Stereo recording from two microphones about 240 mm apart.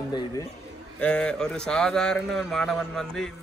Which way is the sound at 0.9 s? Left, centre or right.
Centre.